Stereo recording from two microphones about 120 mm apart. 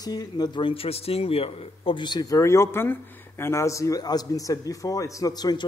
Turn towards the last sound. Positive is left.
turn(degrees=35)  # may be behind; listen again after turning